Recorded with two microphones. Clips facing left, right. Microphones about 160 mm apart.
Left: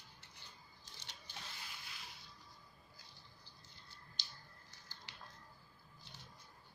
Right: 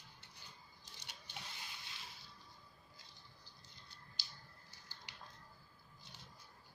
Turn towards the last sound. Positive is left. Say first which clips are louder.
# even
turn(degrees=-15)  # may be behind; listen again after turning